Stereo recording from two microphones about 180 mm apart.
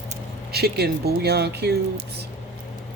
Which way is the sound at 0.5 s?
60° right (ahead or behind).